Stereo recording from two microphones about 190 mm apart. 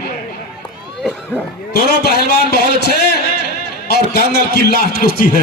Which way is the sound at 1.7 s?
55° left (ahead or behind).